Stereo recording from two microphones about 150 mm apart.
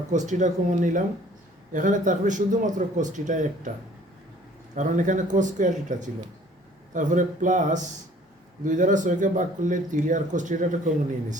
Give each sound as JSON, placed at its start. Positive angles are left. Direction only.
{"t": 0.1, "sound": "speech", "side_deg": -55}
{"t": 4.7, "sound": "speech", "side_deg": -55}
{"t": 6.9, "sound": "speech", "side_deg": -60}